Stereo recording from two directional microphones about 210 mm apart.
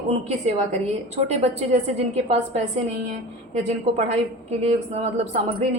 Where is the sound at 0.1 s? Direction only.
35° right (ahead or behind).